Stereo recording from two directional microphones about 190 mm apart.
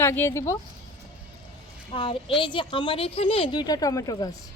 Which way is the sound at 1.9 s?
25° left (ahead or behind).